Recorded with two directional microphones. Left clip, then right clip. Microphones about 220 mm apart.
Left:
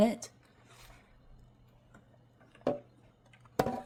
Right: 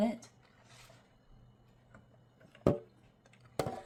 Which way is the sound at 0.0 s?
55° left (ahead or behind).